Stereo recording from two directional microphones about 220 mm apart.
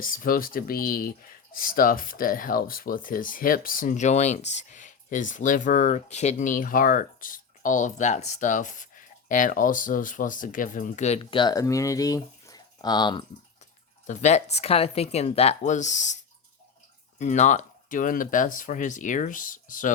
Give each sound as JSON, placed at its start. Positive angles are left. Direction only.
{"t": 0.0, "sound": "speech", "side_deg": 40}
{"t": 14.1, "sound": "speech", "side_deg": 30}
{"t": 17.2, "sound": "speech", "side_deg": 35}